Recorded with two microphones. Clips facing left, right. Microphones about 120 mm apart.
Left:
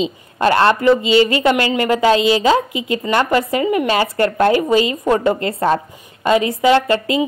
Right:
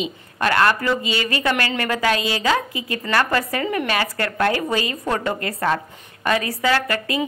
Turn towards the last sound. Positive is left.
turn(degrees=25)  # may be behind; listen again after turning